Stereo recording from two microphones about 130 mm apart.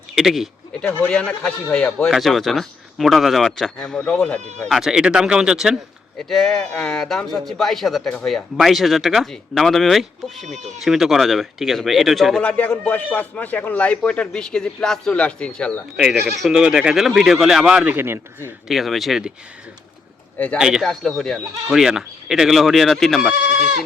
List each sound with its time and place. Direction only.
0.2 s a man's voice: centre (ahead or behind)
16.0 s a man's voice: 5° right (ahead or behind)
17.9 s a man's voice: 20° right (ahead or behind)
18.7 s a man's voice: centre (ahead or behind)
20.6 s a man's voice: 5° right (ahead or behind)